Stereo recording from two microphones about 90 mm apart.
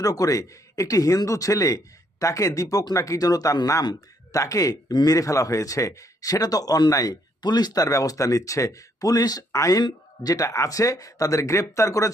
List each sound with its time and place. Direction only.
0.0 s speech: 40° left (ahead or behind)